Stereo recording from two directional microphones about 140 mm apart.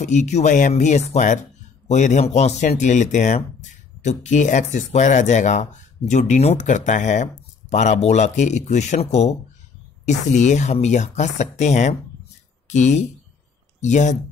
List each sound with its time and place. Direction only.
0.0 s speech: 55° left (ahead or behind)